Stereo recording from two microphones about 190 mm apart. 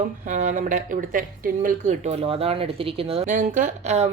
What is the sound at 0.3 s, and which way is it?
Speech, 40° right (ahead or behind).